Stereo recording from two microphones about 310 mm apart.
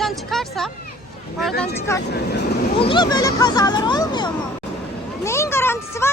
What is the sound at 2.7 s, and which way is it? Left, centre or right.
Speech, centre.